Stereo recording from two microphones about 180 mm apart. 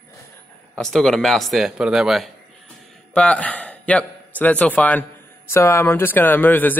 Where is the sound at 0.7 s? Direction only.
Centre (ahead or behind).